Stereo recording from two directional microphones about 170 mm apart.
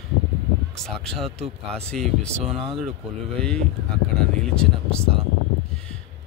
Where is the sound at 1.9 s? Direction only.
5° left (ahead or behind).